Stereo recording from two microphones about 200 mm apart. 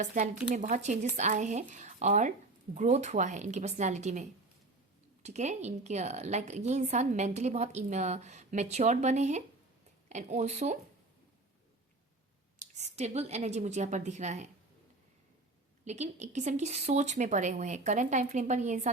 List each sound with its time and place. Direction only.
0.0 s a woman's voice: 35° right (ahead or behind)
12.5 s a woman's voice: 35° right (ahead or behind)
15.8 s a woman's voice: 35° right (ahead or behind)